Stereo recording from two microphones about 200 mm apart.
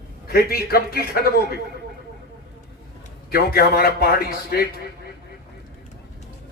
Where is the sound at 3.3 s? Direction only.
50° left (ahead or behind).